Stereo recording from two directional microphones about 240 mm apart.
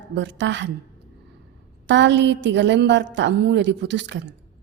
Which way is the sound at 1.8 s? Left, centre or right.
Right.